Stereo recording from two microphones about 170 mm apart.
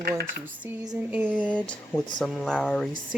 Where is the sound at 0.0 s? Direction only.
65° right (ahead or behind).